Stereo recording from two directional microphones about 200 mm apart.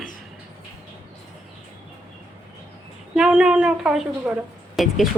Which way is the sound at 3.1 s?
5° right (ahead or behind).